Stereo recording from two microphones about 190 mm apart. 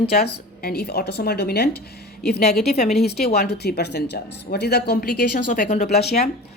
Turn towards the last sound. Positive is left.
turn(degrees=55)  # may be behind; listen again after turning